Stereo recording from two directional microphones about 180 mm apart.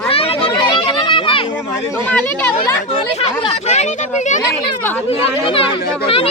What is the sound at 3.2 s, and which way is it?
Speech, 35° left (ahead or behind).